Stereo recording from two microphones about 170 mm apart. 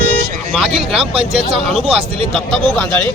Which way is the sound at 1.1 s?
35° right (ahead or behind).